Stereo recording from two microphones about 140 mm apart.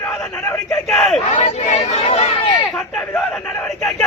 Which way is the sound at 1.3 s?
50° left (ahead or behind).